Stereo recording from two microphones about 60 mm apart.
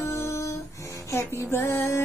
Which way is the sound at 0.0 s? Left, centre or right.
Left.